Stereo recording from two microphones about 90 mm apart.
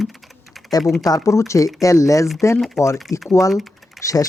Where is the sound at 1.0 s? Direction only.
40° left (ahead or behind).